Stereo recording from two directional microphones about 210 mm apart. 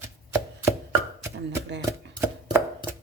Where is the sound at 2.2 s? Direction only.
10° right (ahead or behind).